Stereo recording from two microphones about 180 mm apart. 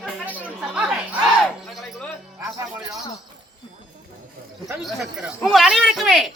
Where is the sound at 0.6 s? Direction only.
5° right (ahead or behind).